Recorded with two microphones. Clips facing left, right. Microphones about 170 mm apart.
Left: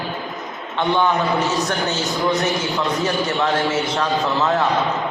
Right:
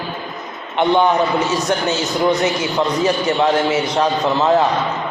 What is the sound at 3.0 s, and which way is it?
A man's voice, 20° right (ahead or behind).